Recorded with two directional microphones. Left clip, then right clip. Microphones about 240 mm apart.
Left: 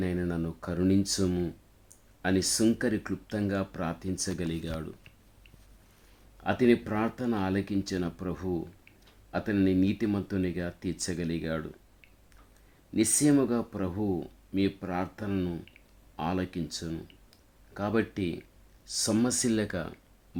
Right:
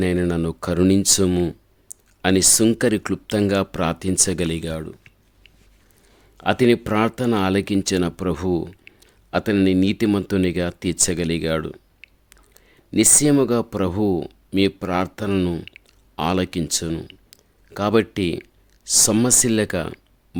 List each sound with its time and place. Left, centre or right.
0.0 s speech: right
6.3 s speech: right